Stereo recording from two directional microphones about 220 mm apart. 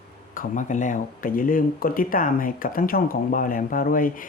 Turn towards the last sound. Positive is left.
turn(degrees=40)  # may be behind; listen again after turning